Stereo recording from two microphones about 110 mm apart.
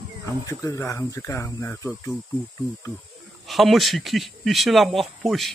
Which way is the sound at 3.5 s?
Centre (ahead or behind).